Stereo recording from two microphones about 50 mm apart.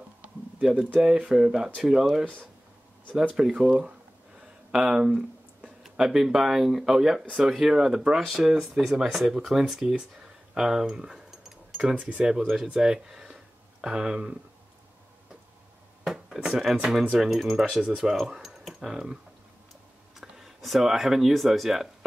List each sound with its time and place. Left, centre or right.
0.6 s speech: centre
3.3 s speech: centre
4.7 s speech: centre
11.2 s a sound: centre
11.8 s speech: right
12.2 s speech: centre
12.7 s a sound: centre
16.3 s speech: centre
20.2 s speech: centre